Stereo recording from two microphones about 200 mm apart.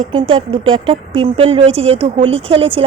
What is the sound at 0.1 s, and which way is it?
Speech, 25° right (ahead or behind).